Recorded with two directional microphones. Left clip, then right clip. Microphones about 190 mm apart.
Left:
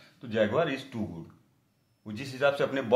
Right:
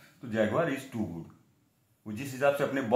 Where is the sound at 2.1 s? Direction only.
25° left (ahead or behind).